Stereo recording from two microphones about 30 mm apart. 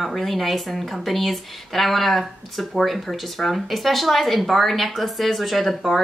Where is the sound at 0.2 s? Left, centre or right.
Centre.